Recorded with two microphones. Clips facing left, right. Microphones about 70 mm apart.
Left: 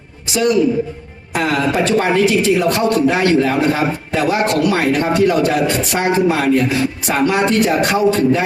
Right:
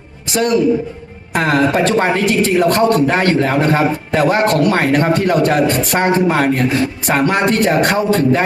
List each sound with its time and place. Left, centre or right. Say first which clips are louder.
0.3 s a man's voice: right 1 dB; right